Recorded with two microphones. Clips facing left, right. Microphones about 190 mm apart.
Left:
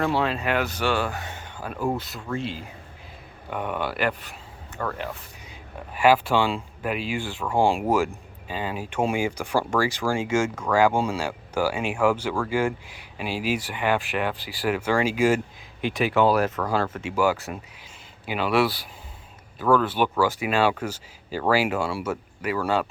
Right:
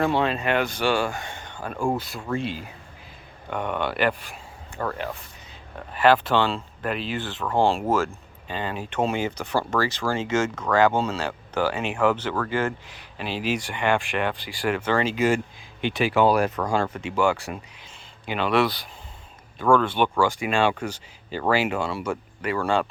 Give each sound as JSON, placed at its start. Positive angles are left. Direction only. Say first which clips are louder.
{"t": 0.1, "sound": "speech", "louder": "right 1 dB", "side_deg": 5}
{"t": 3.5, "sound": "speech", "louder": "right 1 dB", "side_deg": 5}
{"t": 4.8, "sound": "speech", "louder": "right 1 dB", "side_deg": -30}
{"t": 5.9, "sound": "speech", "louder": "even", "side_deg": 10}